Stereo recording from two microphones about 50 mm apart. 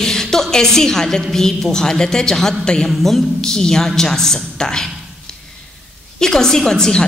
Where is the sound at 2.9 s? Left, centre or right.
Centre.